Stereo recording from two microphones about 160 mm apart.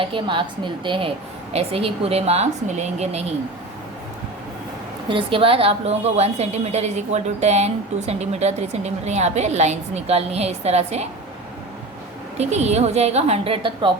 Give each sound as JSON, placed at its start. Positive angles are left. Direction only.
{"t": 0.0, "sound": "a woman's voice", "side_deg": -30}
{"t": 5.0, "sound": "a woman's voice", "side_deg": -30}
{"t": 12.4, "sound": "a woman's voice", "side_deg": -45}